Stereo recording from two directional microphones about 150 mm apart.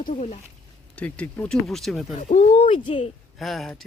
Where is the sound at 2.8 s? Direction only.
35° left (ahead or behind).